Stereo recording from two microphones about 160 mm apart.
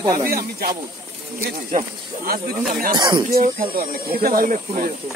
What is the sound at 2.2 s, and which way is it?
Speech, 60° right (ahead or behind).